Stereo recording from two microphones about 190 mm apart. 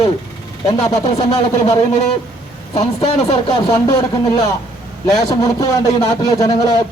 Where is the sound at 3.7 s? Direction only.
20° left (ahead or behind).